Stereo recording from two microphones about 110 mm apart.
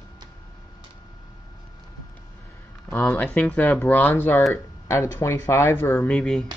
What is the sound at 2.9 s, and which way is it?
Speech, 25° left (ahead or behind).